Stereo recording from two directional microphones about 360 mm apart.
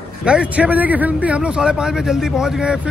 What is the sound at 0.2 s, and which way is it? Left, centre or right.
A man's voice, centre.